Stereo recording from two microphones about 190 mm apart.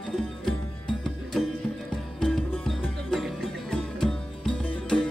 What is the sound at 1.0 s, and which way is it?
Music, centre (ahead or behind).